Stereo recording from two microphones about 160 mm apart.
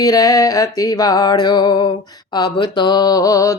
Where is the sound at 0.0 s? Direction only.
20° left (ahead or behind).